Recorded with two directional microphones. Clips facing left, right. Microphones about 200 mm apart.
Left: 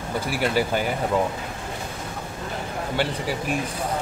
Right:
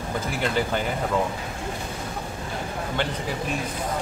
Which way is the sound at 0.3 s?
10° left (ahead or behind).